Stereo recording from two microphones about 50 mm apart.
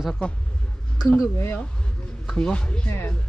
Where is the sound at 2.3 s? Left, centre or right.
Left.